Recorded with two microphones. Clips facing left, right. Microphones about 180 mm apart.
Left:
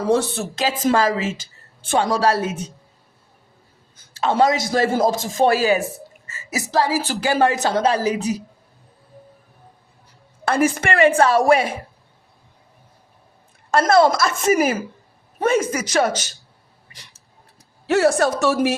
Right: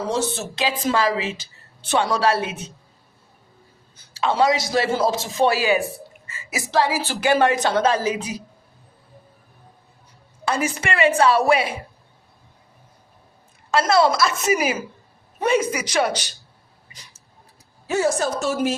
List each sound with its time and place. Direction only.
0.1 s a woman's voice: 55° left (ahead or behind); by 2.6 s 40° left (ahead or behind)
3.9 s a woman's voice: 50° left (ahead or behind)
10.4 s a woman's voice: 55° left (ahead or behind)
13.7 s a woman's voice: 50° left (ahead or behind)
17.8 s a woman's voice: 65° left (ahead or behind)